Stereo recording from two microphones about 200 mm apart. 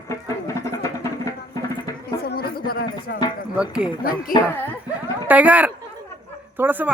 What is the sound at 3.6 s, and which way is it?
Speech, 5° right (ahead or behind).